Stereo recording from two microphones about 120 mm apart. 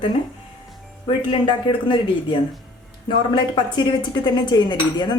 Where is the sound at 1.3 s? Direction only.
45° left (ahead or behind).